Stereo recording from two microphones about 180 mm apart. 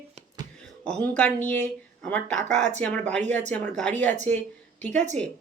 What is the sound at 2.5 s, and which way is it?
Speech, 40° right (ahead or behind).